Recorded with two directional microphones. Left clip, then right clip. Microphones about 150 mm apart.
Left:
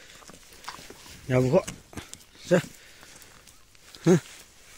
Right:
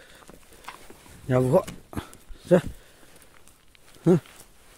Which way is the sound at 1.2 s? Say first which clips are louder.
Right 2 dB; 50° right (ahead or behind).